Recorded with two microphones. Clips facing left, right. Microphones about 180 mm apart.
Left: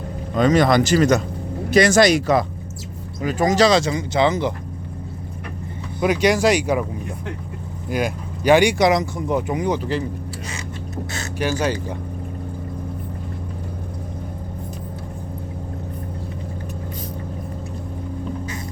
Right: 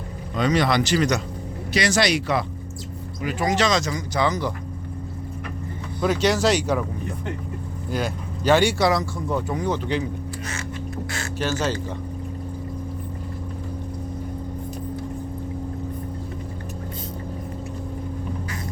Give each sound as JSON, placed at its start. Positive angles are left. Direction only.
{"t": 0.3, "sound": "speech", "side_deg": 50}
{"t": 6.0, "sound": "speech", "side_deg": 10}
{"t": 7.9, "sound": "speech", "side_deg": 10}
{"t": 10.5, "sound": "a sound", "side_deg": 20}